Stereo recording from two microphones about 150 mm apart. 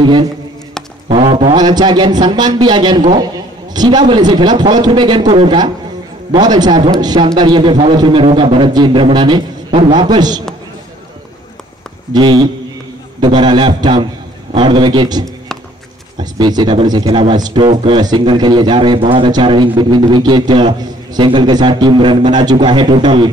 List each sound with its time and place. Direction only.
1.0 s a man's voice: 35° right (ahead or behind)
12.1 s a man's voice: 30° right (ahead or behind)